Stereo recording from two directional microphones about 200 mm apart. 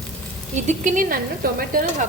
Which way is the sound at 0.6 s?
35° right (ahead or behind).